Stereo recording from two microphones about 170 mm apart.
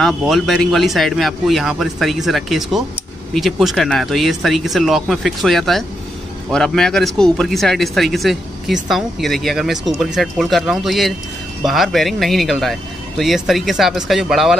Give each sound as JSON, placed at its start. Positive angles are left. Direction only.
{"t": 0.0, "sound": "a man's voice", "side_deg": 0}